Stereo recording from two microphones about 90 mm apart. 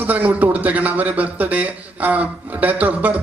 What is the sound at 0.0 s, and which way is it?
A man's voice, 20° right (ahead or behind).